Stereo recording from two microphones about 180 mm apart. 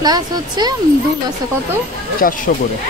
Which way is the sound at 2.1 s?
50° left (ahead or behind).